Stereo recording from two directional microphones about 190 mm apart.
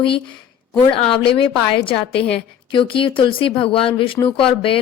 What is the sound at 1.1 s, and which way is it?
A woman's voice, 25° left (ahead or behind).